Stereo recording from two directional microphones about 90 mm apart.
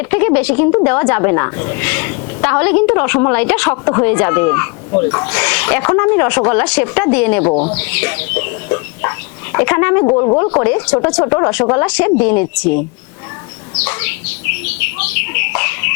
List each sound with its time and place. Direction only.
0.0 s speech: 25° left (ahead or behind)
13.7 s bird: 20° left (ahead or behind)